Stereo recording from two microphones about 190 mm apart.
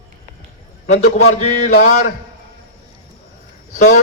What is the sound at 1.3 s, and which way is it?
Mantra, 45° left (ahead or behind).